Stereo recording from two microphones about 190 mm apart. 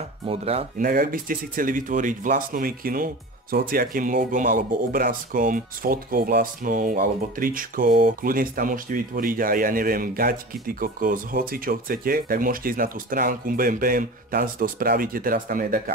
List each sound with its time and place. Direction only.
0.3 s speech: 30° right (ahead or behind)
0.7 s speech: 50° right (ahead or behind)